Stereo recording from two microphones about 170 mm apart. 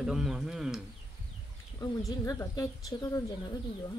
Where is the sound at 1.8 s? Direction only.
20° left (ahead or behind).